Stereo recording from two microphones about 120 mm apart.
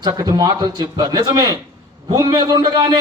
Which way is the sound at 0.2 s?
30° right (ahead or behind).